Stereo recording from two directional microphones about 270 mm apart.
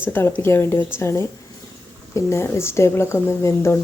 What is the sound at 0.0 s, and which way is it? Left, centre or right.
A woman's voice, centre.